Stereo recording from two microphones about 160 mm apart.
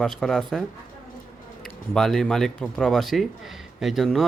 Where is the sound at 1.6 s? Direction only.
Centre (ahead or behind).